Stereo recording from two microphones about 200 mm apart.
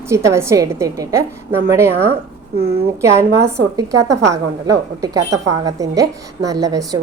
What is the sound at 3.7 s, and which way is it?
A woman's voice, 15° right (ahead or behind).